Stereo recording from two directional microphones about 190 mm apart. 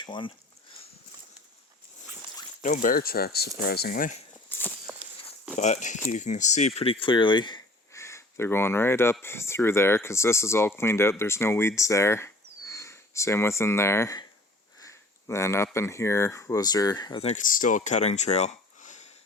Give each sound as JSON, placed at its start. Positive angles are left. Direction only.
{"t": 0.0, "sound": "speech", "side_deg": 25}
{"t": 2.6, "sound": "speech", "side_deg": 45}
{"t": 4.4, "sound": "walk", "side_deg": 10}
{"t": 5.5, "sound": "speech", "side_deg": 40}
{"t": 17.2, "sound": "speech", "side_deg": 45}